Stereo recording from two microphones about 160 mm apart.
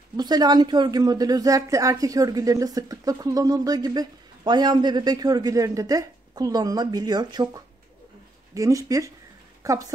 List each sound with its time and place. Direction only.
0.2 s a woman's voice: 25° right (ahead or behind)